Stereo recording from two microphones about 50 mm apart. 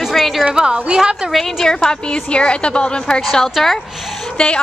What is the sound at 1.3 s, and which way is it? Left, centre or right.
A woman's voice, centre.